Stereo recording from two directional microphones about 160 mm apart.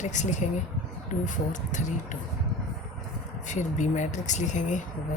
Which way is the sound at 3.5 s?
50° left (ahead or behind).